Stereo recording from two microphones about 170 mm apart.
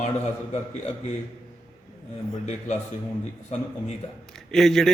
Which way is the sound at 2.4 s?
40° left (ahead or behind).